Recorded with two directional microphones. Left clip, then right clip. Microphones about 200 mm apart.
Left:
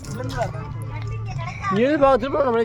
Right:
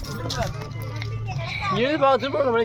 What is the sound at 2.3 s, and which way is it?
Speech, 25° left (ahead or behind).